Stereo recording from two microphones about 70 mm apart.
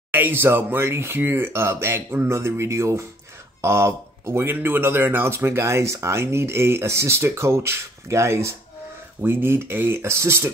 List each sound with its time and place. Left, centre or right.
0.1 s speech: right
4.5 s speech: right